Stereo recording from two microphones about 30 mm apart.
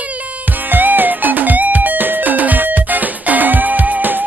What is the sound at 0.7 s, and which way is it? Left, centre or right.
Music, right.